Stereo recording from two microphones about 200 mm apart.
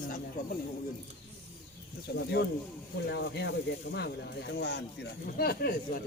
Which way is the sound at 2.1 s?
55° left (ahead or behind).